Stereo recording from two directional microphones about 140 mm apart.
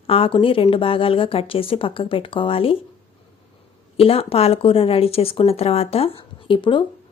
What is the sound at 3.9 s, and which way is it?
Speech, 45° left (ahead or behind).